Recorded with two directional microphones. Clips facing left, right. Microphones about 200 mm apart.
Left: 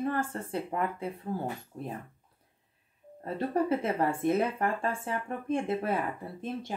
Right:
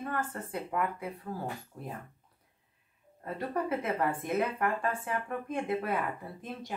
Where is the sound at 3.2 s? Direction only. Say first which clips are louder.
Left 4 dB; 30° left (ahead or behind).